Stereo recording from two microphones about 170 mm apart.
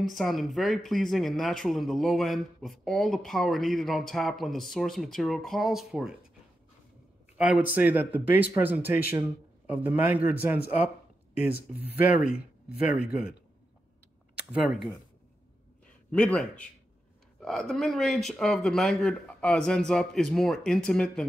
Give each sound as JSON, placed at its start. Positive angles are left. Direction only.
{"t": 0.0, "sound": "speech", "side_deg": 0}
{"t": 7.3, "sound": "speech", "side_deg": -5}
{"t": 12.4, "sound": "speech", "side_deg": 65}
{"t": 12.9, "sound": "speech", "side_deg": -5}
{"t": 14.5, "sound": "speech", "side_deg": 0}
{"t": 16.1, "sound": "a man's voice", "side_deg": 5}